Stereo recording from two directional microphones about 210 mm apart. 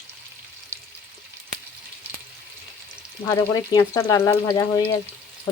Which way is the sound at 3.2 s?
20° left (ahead or behind).